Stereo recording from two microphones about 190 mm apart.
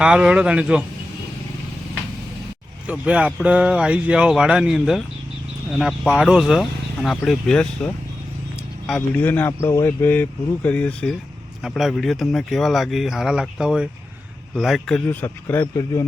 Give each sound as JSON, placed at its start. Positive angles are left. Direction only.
{"t": 0.0, "sound": "speech", "side_deg": -5}
{"t": 2.8, "sound": "speech", "side_deg": -5}